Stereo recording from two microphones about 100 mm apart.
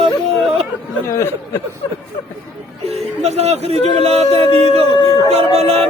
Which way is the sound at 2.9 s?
90° right.